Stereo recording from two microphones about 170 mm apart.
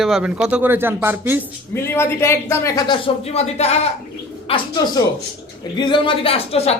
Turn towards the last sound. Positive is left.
turn(degrees=35)  # may be behind; listen again after turning